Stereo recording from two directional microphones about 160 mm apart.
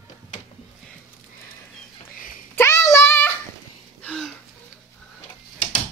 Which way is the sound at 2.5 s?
15° left (ahead or behind).